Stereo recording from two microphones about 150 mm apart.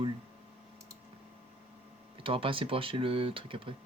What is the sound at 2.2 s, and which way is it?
Speech, 35° right (ahead or behind).